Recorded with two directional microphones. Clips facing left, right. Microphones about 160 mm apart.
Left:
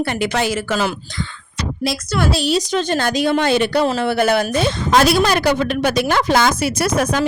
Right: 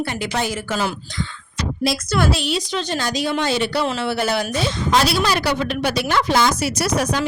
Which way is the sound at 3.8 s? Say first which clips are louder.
Left 5 dB; 45° left (ahead or behind).